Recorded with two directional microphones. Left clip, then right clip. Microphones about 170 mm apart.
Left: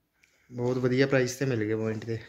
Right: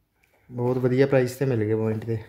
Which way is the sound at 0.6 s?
5° right (ahead or behind).